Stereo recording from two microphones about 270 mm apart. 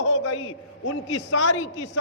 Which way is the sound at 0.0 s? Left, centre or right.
Left.